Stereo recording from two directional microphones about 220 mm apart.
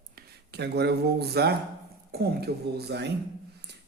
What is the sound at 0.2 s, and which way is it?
Speech, 50° right (ahead or behind).